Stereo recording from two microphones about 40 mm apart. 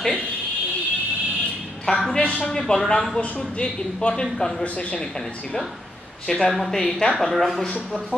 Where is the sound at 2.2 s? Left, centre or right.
Left.